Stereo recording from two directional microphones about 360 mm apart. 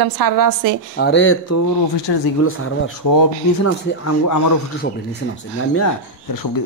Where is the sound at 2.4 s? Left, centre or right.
Left.